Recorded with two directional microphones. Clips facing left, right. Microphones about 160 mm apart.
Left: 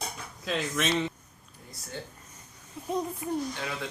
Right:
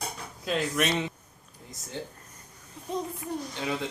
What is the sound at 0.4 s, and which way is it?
Speech, centre (ahead or behind).